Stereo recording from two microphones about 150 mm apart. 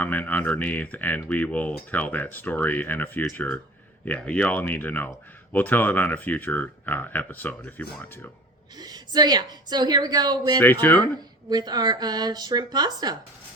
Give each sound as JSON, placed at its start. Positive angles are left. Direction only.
{"t": 0.0, "sound": "speech", "side_deg": 10}
{"t": 8.8, "sound": "a woman's voice", "side_deg": -25}
{"t": 10.6, "sound": "speech", "side_deg": 15}
{"t": 11.4, "sound": "a woman's voice", "side_deg": -25}